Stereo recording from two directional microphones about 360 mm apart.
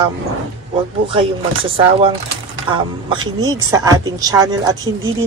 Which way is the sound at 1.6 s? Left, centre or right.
Centre.